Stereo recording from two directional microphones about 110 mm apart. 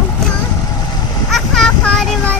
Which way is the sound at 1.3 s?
5° left (ahead or behind).